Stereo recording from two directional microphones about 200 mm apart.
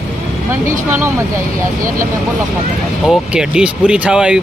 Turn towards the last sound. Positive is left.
turn(degrees=-5)  # may be behind; listen again after turning